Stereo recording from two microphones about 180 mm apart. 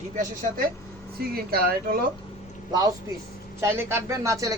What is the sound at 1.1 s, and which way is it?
Speech, 60° right (ahead or behind).